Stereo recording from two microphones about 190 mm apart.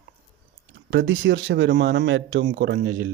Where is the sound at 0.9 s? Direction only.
85° right; by 3.0 s 65° right (ahead or behind).